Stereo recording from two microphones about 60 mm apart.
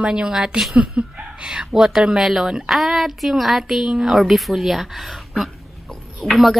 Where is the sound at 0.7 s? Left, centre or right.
Centre.